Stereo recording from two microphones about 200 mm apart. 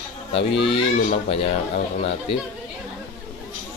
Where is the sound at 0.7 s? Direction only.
30° left (ahead or behind).